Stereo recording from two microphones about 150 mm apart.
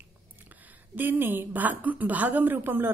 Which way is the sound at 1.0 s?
15° right (ahead or behind).